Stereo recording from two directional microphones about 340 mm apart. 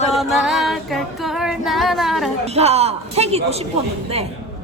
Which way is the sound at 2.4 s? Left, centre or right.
Centre.